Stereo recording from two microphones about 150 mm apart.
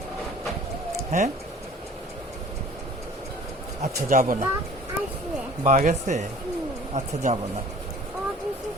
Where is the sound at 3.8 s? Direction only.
50° right (ahead or behind).